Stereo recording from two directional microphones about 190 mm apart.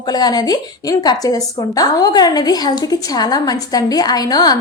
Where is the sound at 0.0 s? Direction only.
20° left (ahead or behind).